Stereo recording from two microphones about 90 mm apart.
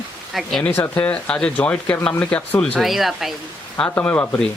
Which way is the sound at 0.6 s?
20° left (ahead or behind).